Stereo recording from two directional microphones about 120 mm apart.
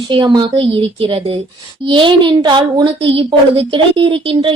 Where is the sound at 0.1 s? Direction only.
40° right (ahead or behind).